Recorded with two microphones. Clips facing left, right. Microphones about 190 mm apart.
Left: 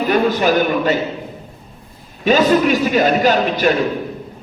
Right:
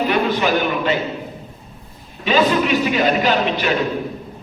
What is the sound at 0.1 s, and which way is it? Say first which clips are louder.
Speech: left 3 dB; 45° left (ahead or behind).